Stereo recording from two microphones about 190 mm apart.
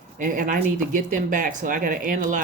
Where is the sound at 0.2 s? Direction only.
45° right (ahead or behind).